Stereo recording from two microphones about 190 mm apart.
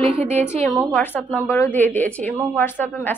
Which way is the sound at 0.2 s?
35° right (ahead or behind).